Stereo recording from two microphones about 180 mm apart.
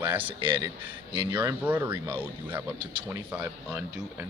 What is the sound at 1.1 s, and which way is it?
Speech, 25° right (ahead or behind).